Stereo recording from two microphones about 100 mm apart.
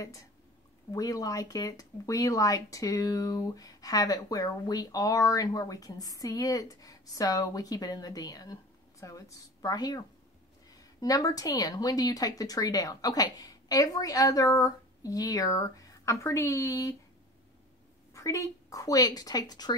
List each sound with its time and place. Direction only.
0.9 s speech: 35° left (ahead or behind)
18.1 s speech: 30° left (ahead or behind)